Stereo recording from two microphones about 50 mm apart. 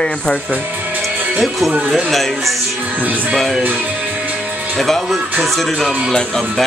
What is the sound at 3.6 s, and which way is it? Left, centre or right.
Music, right.